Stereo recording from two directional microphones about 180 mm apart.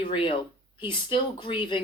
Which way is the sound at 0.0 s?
30° left (ahead or behind).